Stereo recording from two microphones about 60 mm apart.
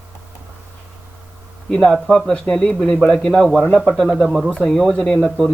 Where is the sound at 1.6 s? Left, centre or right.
Centre.